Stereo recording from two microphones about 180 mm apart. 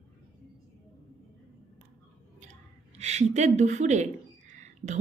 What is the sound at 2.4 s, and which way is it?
Speech, 40° right (ahead or behind).